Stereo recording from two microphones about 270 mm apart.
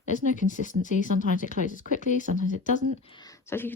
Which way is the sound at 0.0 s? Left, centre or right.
Left.